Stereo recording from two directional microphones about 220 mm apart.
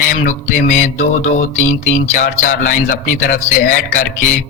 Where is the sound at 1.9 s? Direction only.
35° left (ahead or behind).